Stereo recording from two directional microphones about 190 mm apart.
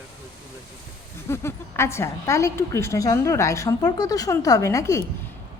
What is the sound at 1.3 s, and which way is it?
A woman's voice, 15° left (ahead or behind).